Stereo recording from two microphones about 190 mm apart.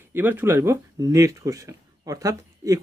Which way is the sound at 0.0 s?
10° right (ahead or behind).